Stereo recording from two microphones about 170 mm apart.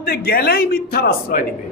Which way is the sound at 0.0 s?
60° left (ahead or behind).